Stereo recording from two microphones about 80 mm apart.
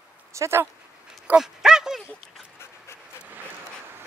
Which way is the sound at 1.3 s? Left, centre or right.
Centre.